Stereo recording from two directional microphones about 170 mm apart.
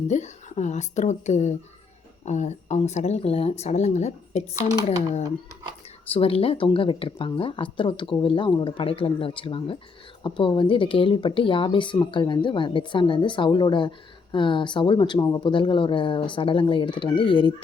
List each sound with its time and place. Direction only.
0.1 s speech: 45° left (ahead or behind)
6.1 s speech: 35° left (ahead or behind)